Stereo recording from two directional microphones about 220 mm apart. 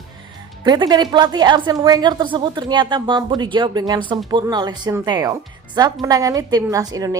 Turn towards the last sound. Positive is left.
turn(degrees=-15)  # may be behind; listen again after turning